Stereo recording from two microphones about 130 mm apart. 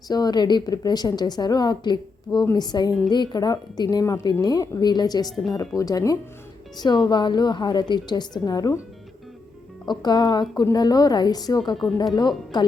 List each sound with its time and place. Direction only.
0.1 s a woman's voice: 30° left (ahead or behind)
9.8 s a woman's voice: 35° left (ahead or behind)